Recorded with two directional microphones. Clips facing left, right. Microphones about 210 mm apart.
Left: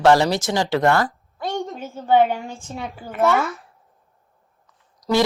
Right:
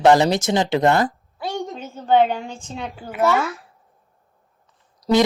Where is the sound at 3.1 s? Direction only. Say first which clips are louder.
Even; centre (ahead or behind).